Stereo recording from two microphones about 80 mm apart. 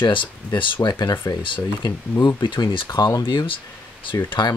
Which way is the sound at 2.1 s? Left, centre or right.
Left.